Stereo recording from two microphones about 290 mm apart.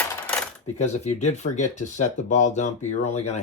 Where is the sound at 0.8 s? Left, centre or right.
Left.